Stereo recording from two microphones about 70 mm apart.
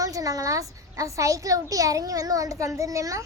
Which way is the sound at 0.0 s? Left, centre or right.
Right.